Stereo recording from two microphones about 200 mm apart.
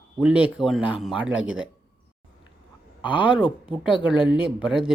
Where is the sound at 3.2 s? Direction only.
25° left (ahead or behind).